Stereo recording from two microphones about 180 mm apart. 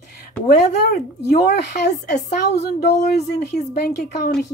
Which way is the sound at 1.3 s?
65° left (ahead or behind).